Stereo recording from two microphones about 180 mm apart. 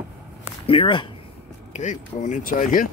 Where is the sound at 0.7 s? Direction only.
30° left (ahead or behind).